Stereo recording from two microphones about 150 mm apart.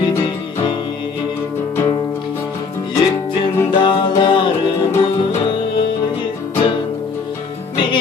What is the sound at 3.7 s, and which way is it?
Music, 35° left (ahead or behind).